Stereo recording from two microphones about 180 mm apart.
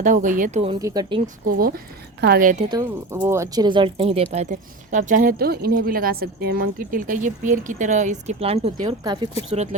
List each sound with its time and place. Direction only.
0.0 s speech: 45° right (ahead or behind)
0.8 s speech: 20° right (ahead or behind)
1.5 s speech: 55° right (ahead or behind)
2.6 s speech: 25° right (ahead or behind)